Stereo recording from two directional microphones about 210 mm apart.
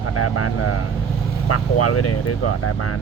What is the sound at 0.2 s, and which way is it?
Speech, 90° left.